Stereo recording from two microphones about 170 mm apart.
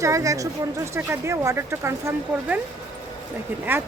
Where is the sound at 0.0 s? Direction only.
20° right (ahead or behind).